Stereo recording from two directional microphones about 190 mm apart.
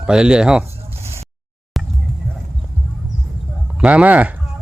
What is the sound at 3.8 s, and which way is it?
Speech, 5° right (ahead or behind).